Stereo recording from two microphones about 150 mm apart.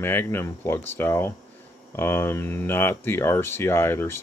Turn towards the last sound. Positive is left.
turn(degrees=15)  # may be behind; listen again after turning